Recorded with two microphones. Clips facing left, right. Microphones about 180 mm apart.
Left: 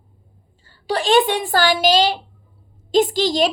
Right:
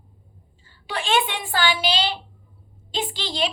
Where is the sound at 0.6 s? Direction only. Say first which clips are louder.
Left 8 dB; 40° left (ahead or behind).